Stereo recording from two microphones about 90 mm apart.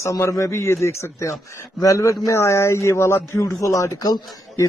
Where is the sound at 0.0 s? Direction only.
35° left (ahead or behind).